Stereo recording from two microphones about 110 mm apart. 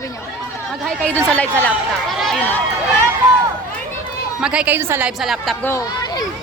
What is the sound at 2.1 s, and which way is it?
Run, centre (ahead or behind).